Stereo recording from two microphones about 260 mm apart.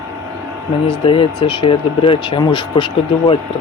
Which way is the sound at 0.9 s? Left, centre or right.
Centre.